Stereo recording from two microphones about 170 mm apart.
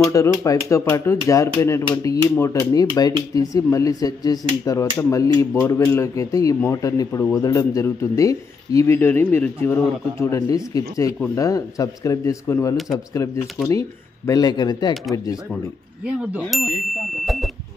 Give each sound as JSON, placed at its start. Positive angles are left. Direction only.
{"t": 0.1, "sound": "speech", "side_deg": 20}
{"t": 13.6, "sound": "speech", "side_deg": 5}
{"t": 14.2, "sound": "speech", "side_deg": 20}
{"t": 16.2, "sound": "speech", "side_deg": -5}